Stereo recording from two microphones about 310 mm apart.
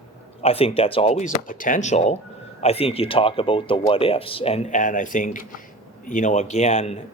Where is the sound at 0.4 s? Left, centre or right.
Centre.